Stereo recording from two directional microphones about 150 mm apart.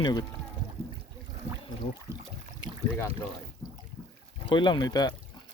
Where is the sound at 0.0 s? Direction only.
30° left (ahead or behind).